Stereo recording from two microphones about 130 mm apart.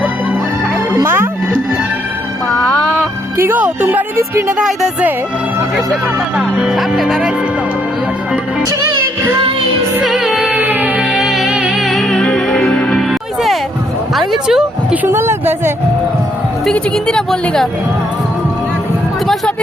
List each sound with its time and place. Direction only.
1.0 s speech: 20° right (ahead or behind)
3.3 s speech: 15° right (ahead or behind)
4.6 s speech: 5° right (ahead or behind)
10.0 s music: centre (ahead or behind)
14.2 s speech: 5° right (ahead or behind)
15.0 s speech: 20° right (ahead or behind)
16.6 s speech: 5° left (ahead or behind)